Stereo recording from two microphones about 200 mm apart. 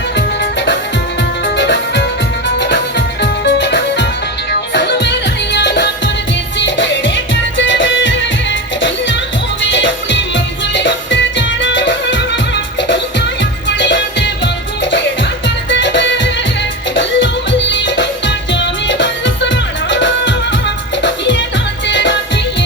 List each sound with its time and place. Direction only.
0.2 s music: 60° left (ahead or behind)
9.6 s music: 65° left (ahead or behind)
13.7 s music: 65° left (ahead or behind)